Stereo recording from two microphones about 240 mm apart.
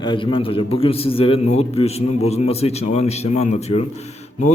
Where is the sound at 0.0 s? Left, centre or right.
Centre.